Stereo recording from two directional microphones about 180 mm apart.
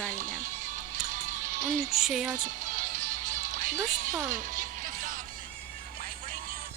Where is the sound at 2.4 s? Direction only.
45° right (ahead or behind).